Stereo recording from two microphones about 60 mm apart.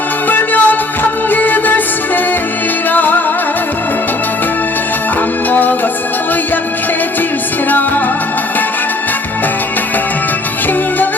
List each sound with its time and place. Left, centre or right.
0.3 s music: left
2.9 s music: left
5.5 s music: left